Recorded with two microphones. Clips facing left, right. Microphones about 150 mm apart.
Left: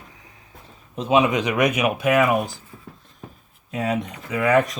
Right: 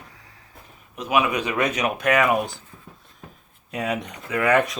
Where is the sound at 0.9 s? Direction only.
25° left (ahead or behind); by 2.5 s 5° left (ahead or behind).